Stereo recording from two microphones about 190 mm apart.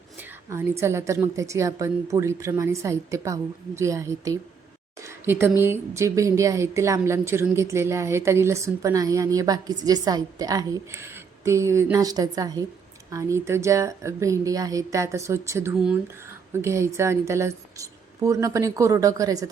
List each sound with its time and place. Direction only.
0.5 s speech: 15° right (ahead or behind)